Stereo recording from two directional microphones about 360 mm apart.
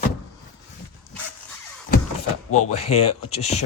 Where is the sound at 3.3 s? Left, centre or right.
Centre.